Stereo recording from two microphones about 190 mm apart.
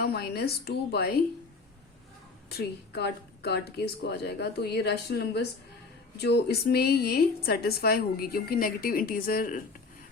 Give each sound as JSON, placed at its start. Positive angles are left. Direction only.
{"t": 0.0, "sound": "speech", "side_deg": 55}
{"t": 2.5, "sound": "a woman's voice", "side_deg": 55}